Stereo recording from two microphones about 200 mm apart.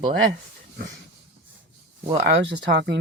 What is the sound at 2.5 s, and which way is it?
Speech, 60° right (ahead or behind).